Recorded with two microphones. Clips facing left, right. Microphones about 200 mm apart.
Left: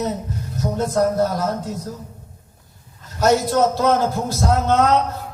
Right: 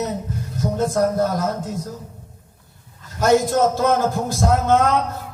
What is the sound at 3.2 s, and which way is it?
A man's voice, 50° right (ahead or behind).